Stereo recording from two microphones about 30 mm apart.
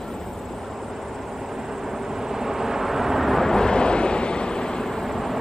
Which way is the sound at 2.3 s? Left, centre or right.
Centre.